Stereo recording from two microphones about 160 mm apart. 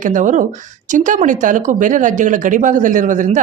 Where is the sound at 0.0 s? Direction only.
55° right (ahead or behind).